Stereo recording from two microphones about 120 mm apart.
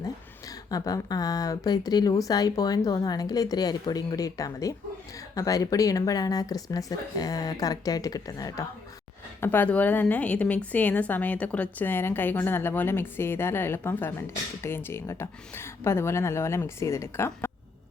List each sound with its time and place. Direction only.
0.7 s speech: 30° left (ahead or behind)
9.4 s a woman's voice: 15° left (ahead or behind)